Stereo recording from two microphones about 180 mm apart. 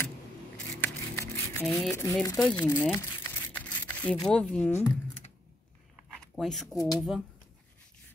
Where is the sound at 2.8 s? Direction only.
15° left (ahead or behind).